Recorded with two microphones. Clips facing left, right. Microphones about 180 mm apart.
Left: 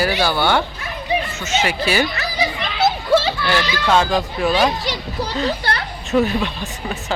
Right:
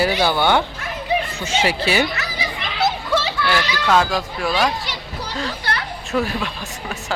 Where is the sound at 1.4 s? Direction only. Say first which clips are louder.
Even; 30° right (ahead or behind).